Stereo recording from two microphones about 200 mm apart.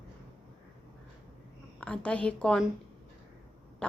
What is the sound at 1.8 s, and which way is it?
Speech, 5° left (ahead or behind).